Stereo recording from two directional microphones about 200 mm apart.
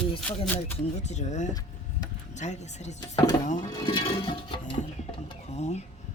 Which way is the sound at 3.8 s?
20° left (ahead or behind).